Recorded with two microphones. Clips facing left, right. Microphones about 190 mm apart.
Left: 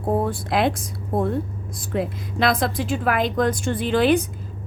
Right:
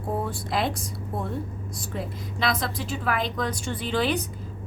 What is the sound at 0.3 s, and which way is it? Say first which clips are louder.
Speech: left 6 dB; 65° left (ahead or behind).